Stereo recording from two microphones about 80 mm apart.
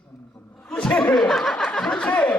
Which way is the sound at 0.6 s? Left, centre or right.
Centre.